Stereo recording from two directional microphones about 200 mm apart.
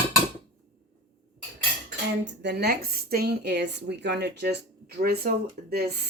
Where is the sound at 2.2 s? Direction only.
60° right (ahead or behind).